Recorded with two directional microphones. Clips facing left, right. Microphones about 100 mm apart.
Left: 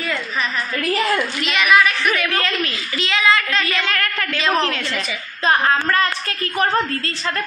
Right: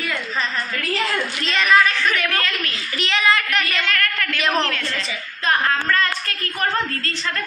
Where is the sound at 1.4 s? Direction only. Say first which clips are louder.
Even; 10° left (ahead or behind).